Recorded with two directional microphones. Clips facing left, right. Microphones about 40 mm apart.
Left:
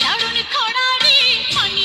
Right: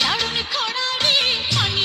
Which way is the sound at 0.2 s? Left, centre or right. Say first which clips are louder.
Left 4 dB; left.